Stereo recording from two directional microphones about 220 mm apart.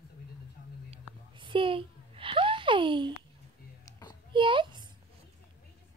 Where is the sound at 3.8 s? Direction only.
20° left (ahead or behind).